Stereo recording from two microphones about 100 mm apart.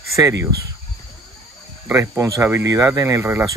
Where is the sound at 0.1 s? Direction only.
30° right (ahead or behind).